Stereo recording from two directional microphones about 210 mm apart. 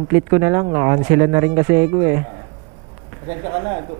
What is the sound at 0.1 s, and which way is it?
Speech, 15° right (ahead or behind).